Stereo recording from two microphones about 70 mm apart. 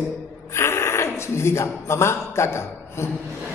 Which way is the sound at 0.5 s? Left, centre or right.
Left.